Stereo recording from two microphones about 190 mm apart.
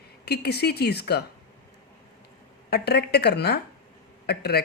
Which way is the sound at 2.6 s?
60° left (ahead or behind).